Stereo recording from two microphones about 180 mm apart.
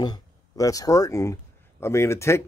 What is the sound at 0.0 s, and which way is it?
Speech, 20° left (ahead or behind).